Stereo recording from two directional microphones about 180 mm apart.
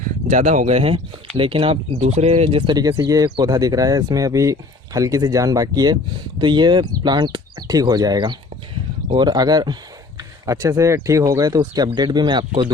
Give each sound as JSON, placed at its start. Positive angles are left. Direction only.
{"t": 0.3, "sound": "speech", "side_deg": -40}